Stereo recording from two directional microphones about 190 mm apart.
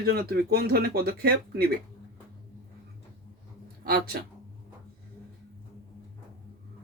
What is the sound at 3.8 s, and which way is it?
Speech, 55° right (ahead or behind).